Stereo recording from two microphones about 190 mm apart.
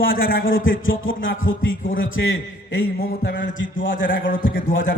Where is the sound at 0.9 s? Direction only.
90° left.